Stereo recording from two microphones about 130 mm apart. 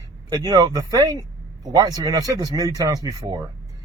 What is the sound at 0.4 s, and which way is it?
Speech, 30° right (ahead or behind).